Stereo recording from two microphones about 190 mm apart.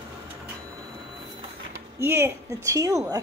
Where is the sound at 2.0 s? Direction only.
10° right (ahead or behind).